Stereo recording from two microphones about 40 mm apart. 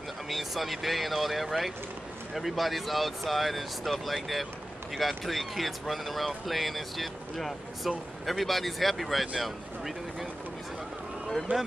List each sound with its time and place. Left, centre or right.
0.3 s speech: centre
11.5 s speech: right